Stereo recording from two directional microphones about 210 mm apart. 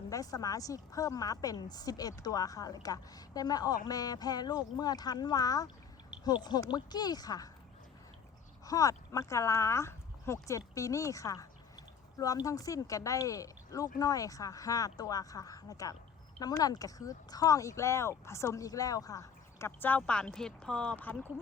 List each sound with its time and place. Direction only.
0.1 s speech: 15° left (ahead or behind)
8.6 s speech: 15° left (ahead or behind)